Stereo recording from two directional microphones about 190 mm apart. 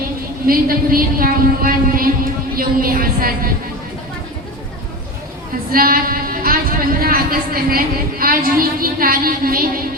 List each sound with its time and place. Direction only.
0.4 s speech: 50° right (ahead or behind)
5.7 s speech: 50° right (ahead or behind)